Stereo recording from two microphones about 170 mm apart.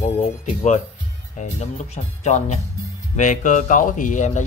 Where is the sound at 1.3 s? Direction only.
40° left (ahead or behind).